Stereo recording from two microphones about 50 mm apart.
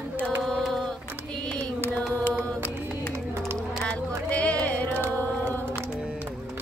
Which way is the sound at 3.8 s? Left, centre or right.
Left.